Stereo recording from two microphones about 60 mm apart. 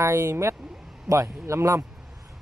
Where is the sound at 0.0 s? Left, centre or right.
Right.